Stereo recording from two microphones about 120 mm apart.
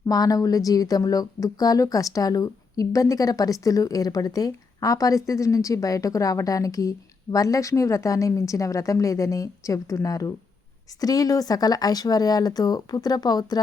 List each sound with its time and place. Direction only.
0.1 s speech: 30° left (ahead or behind)